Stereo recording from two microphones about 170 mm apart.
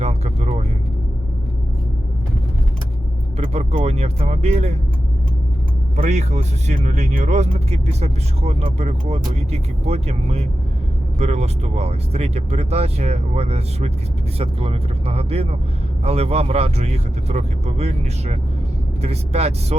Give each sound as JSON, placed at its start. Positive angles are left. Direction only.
{"t": 0.0, "sound": "vehicle", "side_deg": -40}
{"t": 3.3, "sound": "speech", "side_deg": -40}
{"t": 6.0, "sound": "speech", "side_deg": -40}